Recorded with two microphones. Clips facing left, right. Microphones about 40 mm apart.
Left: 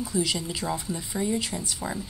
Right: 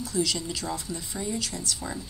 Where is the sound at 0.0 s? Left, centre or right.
Centre.